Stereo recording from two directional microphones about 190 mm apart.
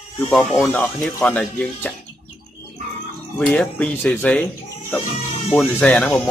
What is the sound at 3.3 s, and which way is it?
Speech, 5° left (ahead or behind).